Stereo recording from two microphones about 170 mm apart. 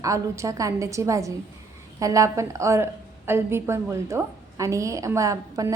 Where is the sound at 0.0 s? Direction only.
20° right (ahead or behind).